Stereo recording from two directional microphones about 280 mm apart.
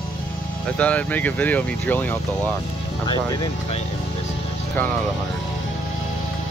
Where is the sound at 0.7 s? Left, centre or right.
Centre.